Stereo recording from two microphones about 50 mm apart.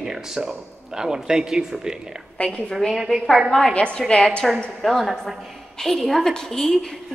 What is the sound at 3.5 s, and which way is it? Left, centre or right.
Speech, centre.